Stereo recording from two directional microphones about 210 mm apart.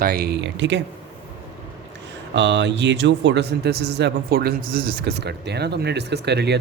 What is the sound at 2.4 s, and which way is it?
A man's voice, 55° right (ahead or behind).